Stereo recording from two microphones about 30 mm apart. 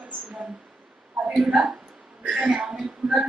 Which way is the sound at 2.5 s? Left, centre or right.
Right.